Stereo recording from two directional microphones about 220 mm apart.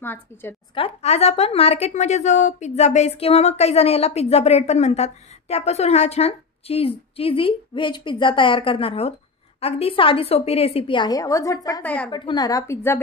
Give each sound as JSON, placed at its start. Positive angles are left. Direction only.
{"t": 0.0, "sound": "a woman's voice", "side_deg": 10}
{"t": 0.7, "sound": "a woman's voice", "side_deg": 25}
{"t": 12.1, "sound": "a woman's voice", "side_deg": 20}